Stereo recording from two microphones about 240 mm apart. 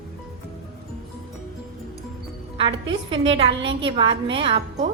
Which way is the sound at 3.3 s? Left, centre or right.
Right.